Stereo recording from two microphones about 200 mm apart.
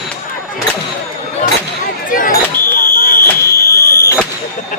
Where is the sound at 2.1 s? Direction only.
45° left (ahead or behind).